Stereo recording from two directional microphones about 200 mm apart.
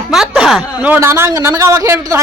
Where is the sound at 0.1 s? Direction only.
Centre (ahead or behind).